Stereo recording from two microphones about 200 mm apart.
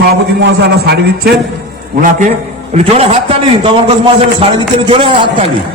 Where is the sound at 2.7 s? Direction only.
30° right (ahead or behind).